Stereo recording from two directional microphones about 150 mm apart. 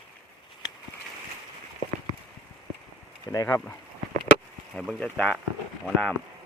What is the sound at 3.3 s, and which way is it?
Speech, 20° left (ahead or behind).